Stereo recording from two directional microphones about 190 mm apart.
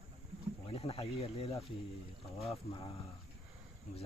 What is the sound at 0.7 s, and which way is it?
Speech, 30° left (ahead or behind).